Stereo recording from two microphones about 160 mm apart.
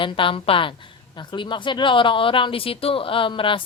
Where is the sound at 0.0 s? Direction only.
35° left (ahead or behind).